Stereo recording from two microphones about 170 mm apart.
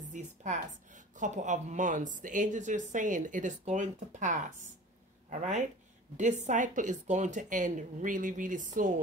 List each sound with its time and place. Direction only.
0.1 s speech: 45° right (ahead or behind)